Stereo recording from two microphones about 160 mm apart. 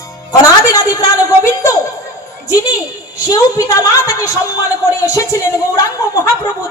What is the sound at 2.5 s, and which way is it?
Speech, 20° left (ahead or behind).